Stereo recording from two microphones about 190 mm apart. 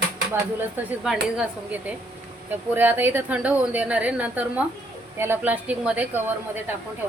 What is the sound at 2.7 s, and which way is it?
A woman's voice, 10° right (ahead or behind).